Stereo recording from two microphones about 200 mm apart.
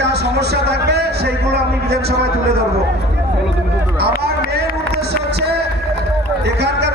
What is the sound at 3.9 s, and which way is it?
Run, 55° right (ahead or behind).